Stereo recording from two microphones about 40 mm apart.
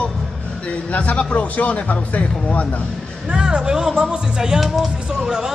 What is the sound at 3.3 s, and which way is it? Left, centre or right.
Speech, right.